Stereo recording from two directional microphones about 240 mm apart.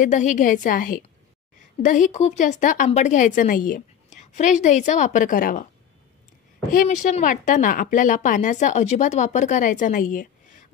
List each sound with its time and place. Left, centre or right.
0.0 s a woman's voice: left
6.7 s a woman's voice: left